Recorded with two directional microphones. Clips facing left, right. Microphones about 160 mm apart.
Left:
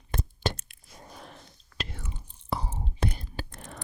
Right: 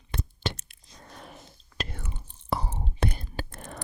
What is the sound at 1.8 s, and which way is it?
Whispering, 50° right (ahead or behind).